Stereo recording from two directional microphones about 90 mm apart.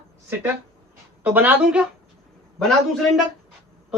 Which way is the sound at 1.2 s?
20° right (ahead or behind).